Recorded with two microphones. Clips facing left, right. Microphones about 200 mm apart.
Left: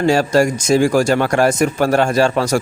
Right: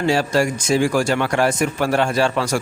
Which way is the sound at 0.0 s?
45° left (ahead or behind).